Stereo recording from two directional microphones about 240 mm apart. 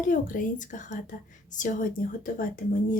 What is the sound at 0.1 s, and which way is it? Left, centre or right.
Speech, left.